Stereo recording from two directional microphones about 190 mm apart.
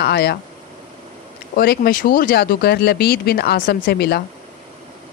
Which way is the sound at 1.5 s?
55° left (ahead or behind).